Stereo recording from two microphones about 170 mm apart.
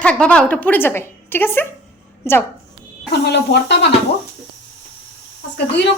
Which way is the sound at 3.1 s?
80° left.